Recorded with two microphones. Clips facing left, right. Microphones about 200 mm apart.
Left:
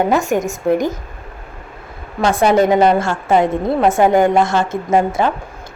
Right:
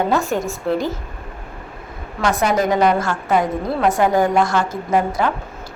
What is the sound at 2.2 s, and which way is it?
A woman's voice, 30° left (ahead or behind).